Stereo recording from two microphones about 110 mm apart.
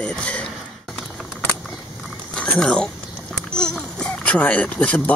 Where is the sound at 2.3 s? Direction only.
10° left (ahead or behind).